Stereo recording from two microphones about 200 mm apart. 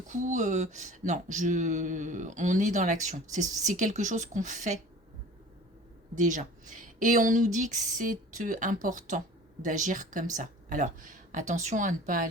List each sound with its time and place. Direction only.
0.1 s speech: 40° right (ahead or behind)
6.1 s speech: 40° right (ahead or behind)